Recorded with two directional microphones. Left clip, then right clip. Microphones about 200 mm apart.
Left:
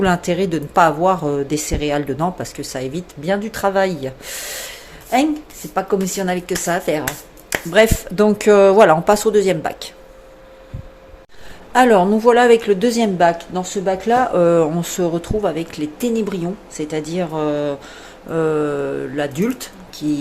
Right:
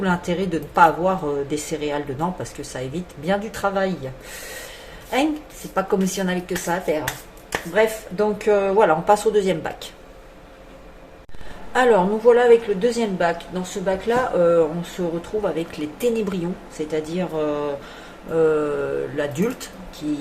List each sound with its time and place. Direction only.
0.0 s speech: 45° left (ahead or behind)
5.7 s speech: 30° left (ahead or behind)
7.7 s speech: 60° left (ahead or behind); by 9.7 s 40° left (ahead or behind)
11.7 s a woman's voice: 45° left (ahead or behind)
14.3 s speech: 60° left (ahead or behind)
15.2 s speech: 40° left (ahead or behind)